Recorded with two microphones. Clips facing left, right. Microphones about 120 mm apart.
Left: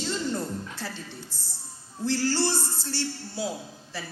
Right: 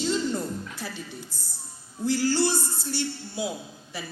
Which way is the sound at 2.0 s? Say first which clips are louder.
Right 2 dB; 15° right (ahead or behind).